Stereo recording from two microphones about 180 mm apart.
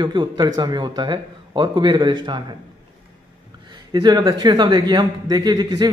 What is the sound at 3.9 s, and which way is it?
A man's voice, 20° right (ahead or behind).